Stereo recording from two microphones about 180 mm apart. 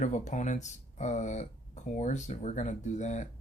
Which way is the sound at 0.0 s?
40° left (ahead or behind).